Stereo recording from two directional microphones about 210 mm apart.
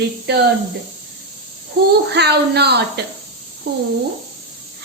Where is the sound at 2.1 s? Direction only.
50° right (ahead or behind).